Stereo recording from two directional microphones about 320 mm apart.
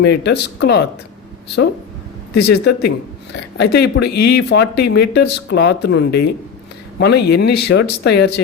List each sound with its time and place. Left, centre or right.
0.0 s speech: left
2.3 s speech: left